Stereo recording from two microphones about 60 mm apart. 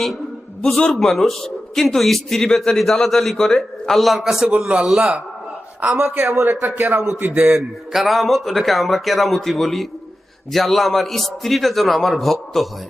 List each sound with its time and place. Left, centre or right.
0.9 s a man's voice: centre
5.8 s a man's voice: right
7.3 s a man's voice: right
7.9 s a man's voice: centre